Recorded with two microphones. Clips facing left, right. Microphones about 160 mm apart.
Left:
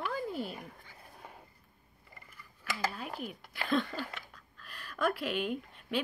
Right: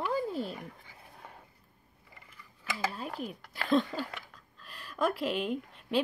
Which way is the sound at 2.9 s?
35° right (ahead or behind).